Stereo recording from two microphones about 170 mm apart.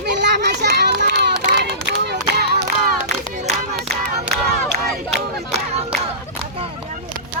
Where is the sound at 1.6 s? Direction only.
75° right (ahead or behind).